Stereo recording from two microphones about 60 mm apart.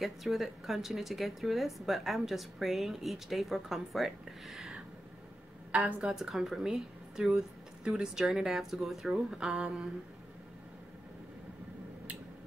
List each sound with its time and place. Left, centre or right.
0.0 s speech: centre
5.7 s a woman's voice: right
6.1 s a woman's voice: centre